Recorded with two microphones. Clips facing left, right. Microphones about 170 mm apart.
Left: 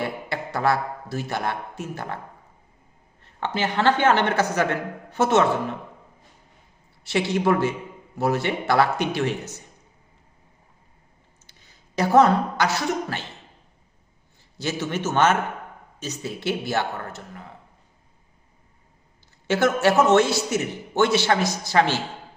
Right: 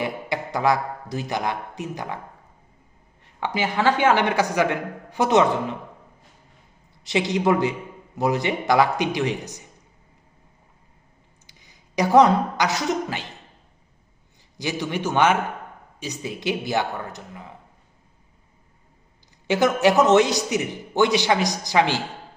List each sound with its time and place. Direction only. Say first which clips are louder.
0.0 s a man's voice: right 2 dB; 15° right (ahead or behind)
3.2 s a man's voice: even; 10° right (ahead or behind)
7.0 s a man's voice: right 1 dB; 20° right (ahead or behind)
11.4 s speech: right 2 dB; 15° right (ahead or behind)
14.6 s a man's voice: even; 15° right (ahead or behind)
19.5 s a man's voice: right 1 dB; 15° right (ahead or behind)